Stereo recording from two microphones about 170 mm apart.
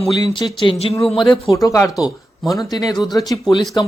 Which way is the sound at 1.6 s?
15° left (ahead or behind).